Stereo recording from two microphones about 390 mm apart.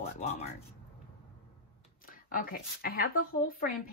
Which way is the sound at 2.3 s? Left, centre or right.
Left.